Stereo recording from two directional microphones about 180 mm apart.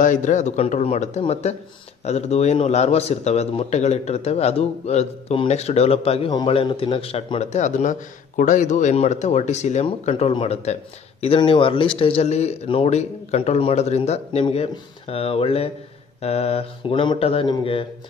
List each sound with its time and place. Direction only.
0.0 s speech: 45° left (ahead or behind); by 17.8 s 30° left (ahead or behind)